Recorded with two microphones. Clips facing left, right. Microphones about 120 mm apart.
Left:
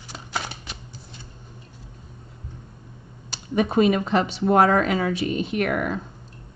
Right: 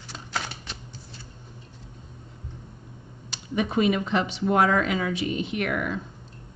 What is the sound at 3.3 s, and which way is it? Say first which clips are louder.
Speech: left 4 dB; 40° left (ahead or behind).